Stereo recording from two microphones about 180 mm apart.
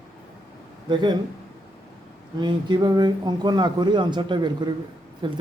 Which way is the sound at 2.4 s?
25° right (ahead or behind).